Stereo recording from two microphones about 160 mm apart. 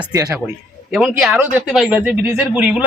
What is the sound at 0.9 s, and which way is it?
Speech, centre (ahead or behind).